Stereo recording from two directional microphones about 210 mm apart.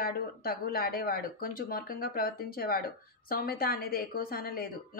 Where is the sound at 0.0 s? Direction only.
45° left (ahead or behind).